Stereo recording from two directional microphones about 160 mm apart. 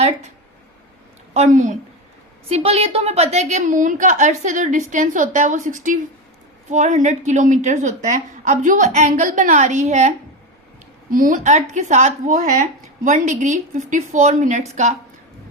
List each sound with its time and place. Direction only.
1.3 s a woman's voice: 45° right (ahead or behind)
2.5 s a woman's voice: 40° right (ahead or behind)
11.1 s a woman's voice: 55° right (ahead or behind)